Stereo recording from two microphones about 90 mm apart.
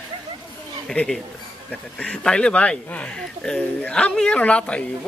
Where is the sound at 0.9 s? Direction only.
5° left (ahead or behind).